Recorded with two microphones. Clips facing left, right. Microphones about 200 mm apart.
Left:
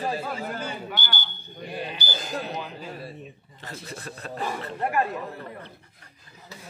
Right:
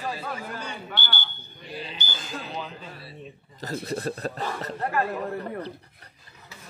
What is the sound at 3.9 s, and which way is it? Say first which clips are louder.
Speech: right 8 dB; 40° right (ahead or behind).